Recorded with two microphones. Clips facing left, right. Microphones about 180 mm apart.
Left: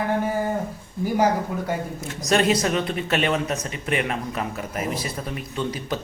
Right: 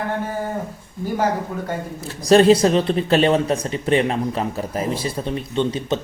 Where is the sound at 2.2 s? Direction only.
30° right (ahead or behind).